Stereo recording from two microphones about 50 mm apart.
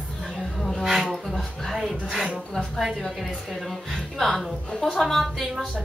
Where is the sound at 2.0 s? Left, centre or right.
Centre.